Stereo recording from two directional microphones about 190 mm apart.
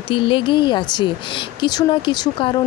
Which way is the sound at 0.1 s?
25° left (ahead or behind).